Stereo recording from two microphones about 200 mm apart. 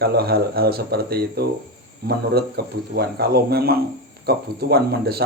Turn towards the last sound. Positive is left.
turn(degrees=-50)  # may be behind; listen again after turning